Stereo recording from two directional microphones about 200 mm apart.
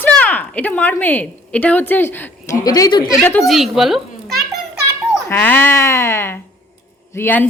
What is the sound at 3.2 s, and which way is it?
Speech, 10° left (ahead or behind).